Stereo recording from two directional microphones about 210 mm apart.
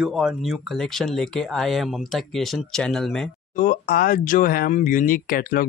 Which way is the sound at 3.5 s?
45° left (ahead or behind).